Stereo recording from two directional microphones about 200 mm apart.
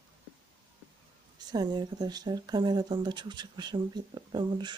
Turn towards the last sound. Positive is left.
turn(degrees=-20)  # may be behind; listen again after turning